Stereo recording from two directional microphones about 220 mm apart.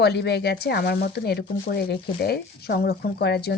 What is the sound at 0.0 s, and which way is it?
Speech, 50° left (ahead or behind).